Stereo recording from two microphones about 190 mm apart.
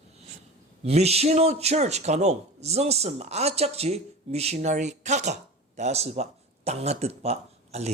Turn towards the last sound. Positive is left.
turn(degrees=-35)  # may be behind; listen again after turning